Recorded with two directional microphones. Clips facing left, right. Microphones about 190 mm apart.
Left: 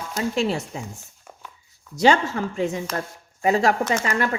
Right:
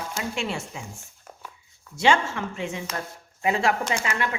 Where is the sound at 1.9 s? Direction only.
40° left (ahead or behind).